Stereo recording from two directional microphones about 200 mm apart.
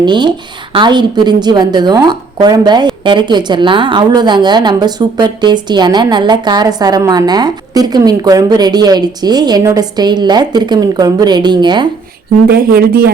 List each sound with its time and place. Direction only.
0.0 s a woman's voice: 20° right (ahead or behind)
12.5 s speech: 50° right (ahead or behind)